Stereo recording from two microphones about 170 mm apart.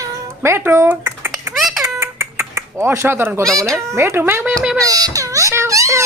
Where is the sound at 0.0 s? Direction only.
15° right (ahead or behind).